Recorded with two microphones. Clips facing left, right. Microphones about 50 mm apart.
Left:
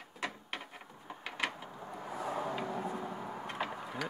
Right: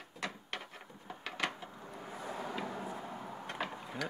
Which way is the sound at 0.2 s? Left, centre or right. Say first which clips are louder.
Left 1 dB; centre.